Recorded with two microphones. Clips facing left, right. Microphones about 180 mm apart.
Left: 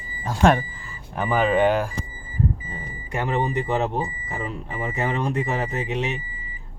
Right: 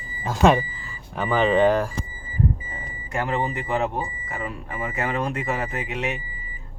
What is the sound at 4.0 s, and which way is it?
Speech, 20° left (ahead or behind).